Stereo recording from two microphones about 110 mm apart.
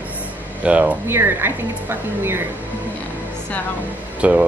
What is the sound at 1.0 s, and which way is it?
Speech, 20° right (ahead or behind).